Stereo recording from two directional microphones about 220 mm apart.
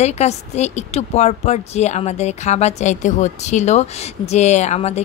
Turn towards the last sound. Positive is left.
turn(degrees=30)  # may be behind; listen again after turning